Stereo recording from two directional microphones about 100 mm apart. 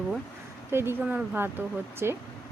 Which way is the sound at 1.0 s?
10° right (ahead or behind).